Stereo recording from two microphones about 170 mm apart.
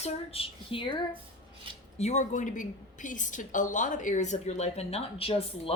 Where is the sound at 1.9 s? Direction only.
40° left (ahead or behind).